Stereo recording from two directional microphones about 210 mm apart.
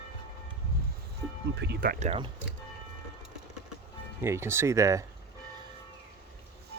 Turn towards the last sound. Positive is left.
turn(degrees=-15)  # may be behind; listen again after turning